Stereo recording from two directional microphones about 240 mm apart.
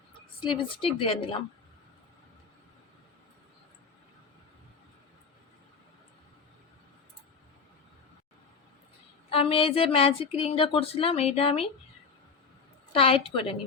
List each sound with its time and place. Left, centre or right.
0.5 s speech: left
9.3 s speech: left
12.9 s speech: left